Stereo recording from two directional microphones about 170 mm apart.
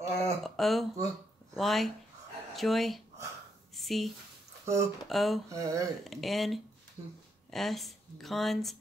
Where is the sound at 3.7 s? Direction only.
Centre (ahead or behind).